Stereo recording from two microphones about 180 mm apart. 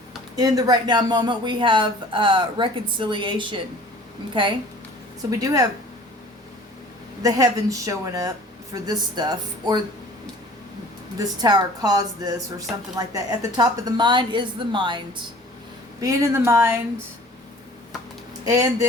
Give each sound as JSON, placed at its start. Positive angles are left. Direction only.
{"t": 0.3, "sound": "speech", "side_deg": -20}
{"t": 5.4, "sound": "speech", "side_deg": -20}
{"t": 7.2, "sound": "speech", "side_deg": -20}
{"t": 11.2, "sound": "speech", "side_deg": -20}
{"t": 18.4, "sound": "speech", "side_deg": -20}